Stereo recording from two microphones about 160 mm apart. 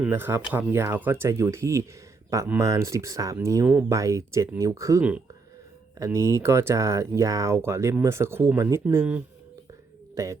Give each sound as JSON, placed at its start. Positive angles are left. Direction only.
{"t": 0.0, "sound": "speech", "side_deg": -15}